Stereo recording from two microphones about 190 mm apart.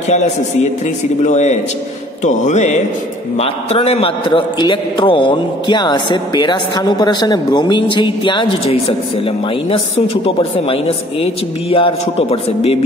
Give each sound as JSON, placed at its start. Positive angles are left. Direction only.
{"t": 1.2, "sound": "a man's voice", "side_deg": 35}